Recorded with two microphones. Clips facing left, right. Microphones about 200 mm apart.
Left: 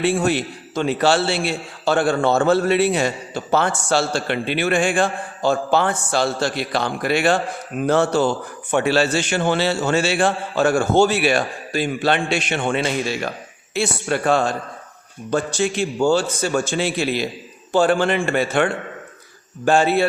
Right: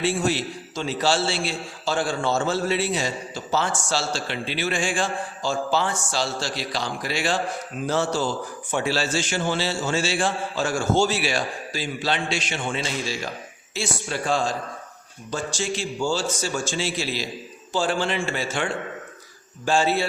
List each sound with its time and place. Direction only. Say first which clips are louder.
0.0 s a man's voice: left 4 dB; 60° left (ahead or behind)